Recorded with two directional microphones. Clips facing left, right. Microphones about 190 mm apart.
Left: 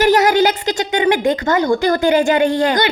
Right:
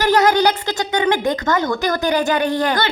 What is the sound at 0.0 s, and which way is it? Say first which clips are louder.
A child's voice: left 2 dB; 20° left (ahead or behind).